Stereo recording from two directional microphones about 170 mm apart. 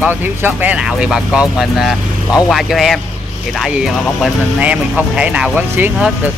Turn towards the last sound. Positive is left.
turn(degrees=-5)  # may be behind; listen again after turning